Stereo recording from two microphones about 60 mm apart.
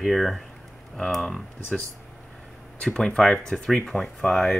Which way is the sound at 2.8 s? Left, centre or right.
Centre.